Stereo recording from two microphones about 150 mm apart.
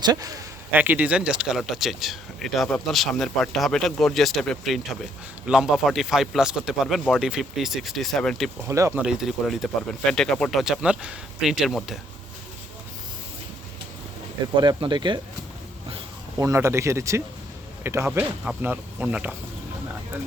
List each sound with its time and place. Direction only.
0.0 s speech: 25° right (ahead or behind)
0.7 s speech: 10° right (ahead or behind)
8.6 s speech: 20° right (ahead or behind)
9.0 s speech: 5° right (ahead or behind)
14.4 s speech: 30° right (ahead or behind)
16.4 s speech: 20° right (ahead or behind)